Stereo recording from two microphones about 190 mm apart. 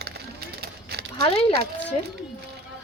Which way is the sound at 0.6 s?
60° right (ahead or behind).